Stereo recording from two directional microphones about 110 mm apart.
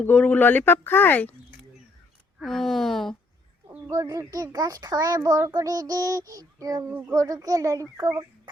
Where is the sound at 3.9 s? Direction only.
30° right (ahead or behind).